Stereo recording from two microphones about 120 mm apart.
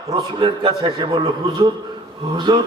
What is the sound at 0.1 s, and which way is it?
A man's voice, 40° right (ahead or behind).